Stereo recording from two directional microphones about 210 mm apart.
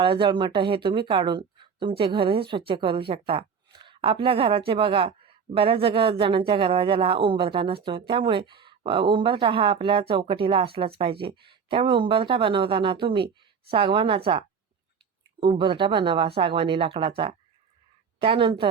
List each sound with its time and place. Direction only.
0.0 s speech: 25° right (ahead or behind)